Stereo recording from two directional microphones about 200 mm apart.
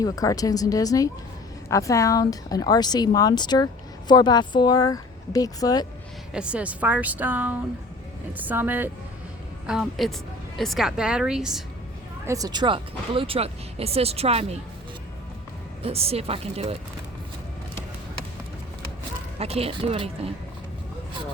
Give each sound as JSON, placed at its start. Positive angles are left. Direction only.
{"t": 0.0, "sound": "a woman's voice", "side_deg": 15}
{"t": 6.3, "sound": "a woman's voice", "side_deg": -5}
{"t": 12.2, "sound": "speech", "side_deg": -15}
{"t": 15.8, "sound": "speech", "side_deg": -30}
{"t": 19.4, "sound": "speech", "side_deg": -30}